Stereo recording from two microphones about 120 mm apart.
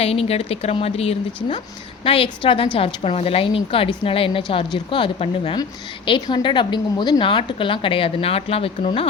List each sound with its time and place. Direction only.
0.0 s a woman's voice: 55° left (ahead or behind)